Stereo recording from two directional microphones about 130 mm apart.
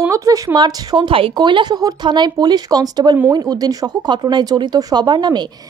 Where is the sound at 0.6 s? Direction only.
30° right (ahead or behind).